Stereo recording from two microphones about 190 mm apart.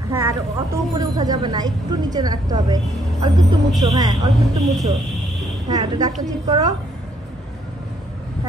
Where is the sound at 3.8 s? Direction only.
20° right (ahead or behind).